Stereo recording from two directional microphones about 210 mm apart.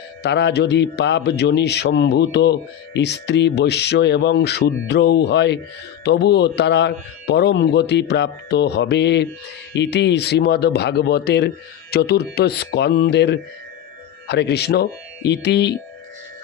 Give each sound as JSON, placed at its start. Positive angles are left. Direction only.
{"t": 0.2, "sound": "a man's voice", "side_deg": 55}